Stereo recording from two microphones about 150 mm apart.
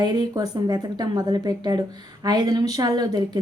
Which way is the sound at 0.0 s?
30° right (ahead or behind).